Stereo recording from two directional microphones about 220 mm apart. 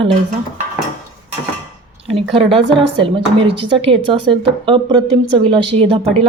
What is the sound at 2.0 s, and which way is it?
Speech, 25° right (ahead or behind).